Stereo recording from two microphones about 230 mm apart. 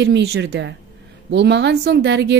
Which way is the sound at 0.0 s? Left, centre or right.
Right.